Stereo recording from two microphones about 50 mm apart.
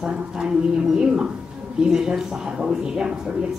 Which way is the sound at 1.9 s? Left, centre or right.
Centre.